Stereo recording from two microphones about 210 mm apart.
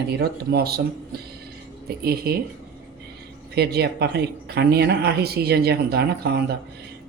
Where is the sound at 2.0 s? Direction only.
45° right (ahead or behind).